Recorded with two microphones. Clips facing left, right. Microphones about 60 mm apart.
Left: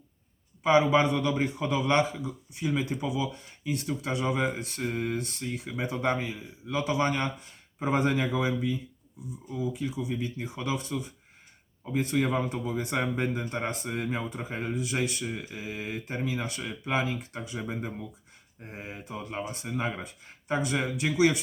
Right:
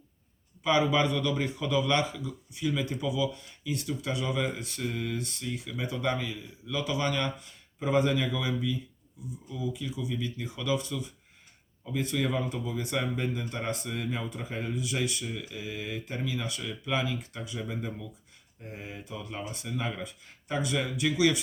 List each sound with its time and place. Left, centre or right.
0.6 s a man's voice: left